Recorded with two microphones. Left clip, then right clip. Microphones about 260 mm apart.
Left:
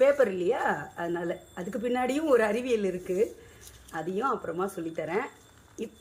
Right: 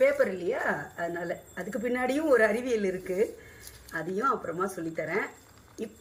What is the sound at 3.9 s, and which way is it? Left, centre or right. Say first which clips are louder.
A woman's voice: right 1 dB; centre.